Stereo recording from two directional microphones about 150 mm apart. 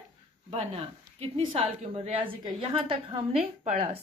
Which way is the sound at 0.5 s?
40° right (ahead or behind).